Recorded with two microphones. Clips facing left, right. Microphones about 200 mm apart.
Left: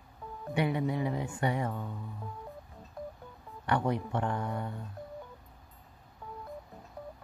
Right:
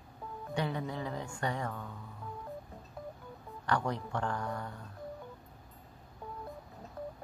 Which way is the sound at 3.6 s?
20° left (ahead or behind).